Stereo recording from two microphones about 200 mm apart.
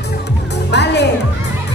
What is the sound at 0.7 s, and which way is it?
Music, 55° left (ahead or behind).